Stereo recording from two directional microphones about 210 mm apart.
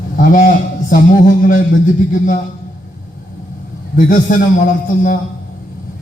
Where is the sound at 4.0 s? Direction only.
40° left (ahead or behind).